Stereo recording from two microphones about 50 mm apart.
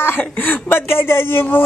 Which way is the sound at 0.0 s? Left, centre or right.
Left.